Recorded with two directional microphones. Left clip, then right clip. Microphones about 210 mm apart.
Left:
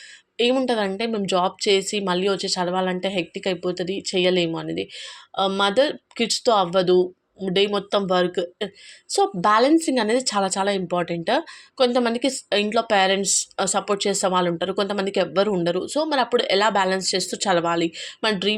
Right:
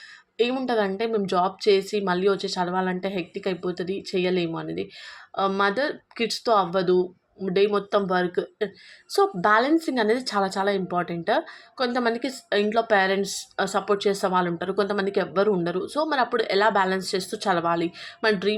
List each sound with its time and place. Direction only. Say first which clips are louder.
0.3 s speech: left 3 dB; 25° left (ahead or behind)